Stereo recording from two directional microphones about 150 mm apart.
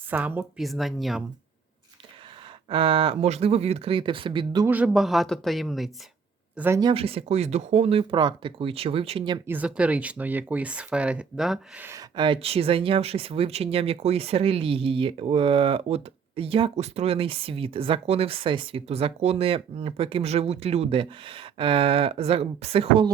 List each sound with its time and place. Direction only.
0.1 s speech: 15° right (ahead or behind)
0.6 s speech: centre (ahead or behind)
2.6 s speech: 35° right (ahead or behind)
4.6 s speech: 10° right (ahead or behind)
6.9 s speech: 40° right (ahead or behind)
9.5 s speech: 10° right (ahead or behind)
11.8 s speech: 20° right (ahead or behind)
12.1 s speech: 35° right (ahead or behind)